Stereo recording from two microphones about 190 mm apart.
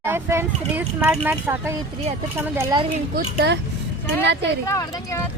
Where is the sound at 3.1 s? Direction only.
60° right (ahead or behind).